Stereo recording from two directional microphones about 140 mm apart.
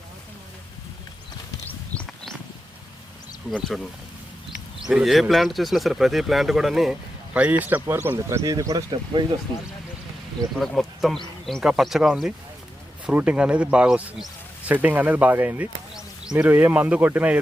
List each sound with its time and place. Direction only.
1.6 s horse: 10° left (ahead or behind)
4.8 s speech: 5° right (ahead or behind); by 9.2 s 25° right (ahead or behind)
10.6 s speech: centre (ahead or behind)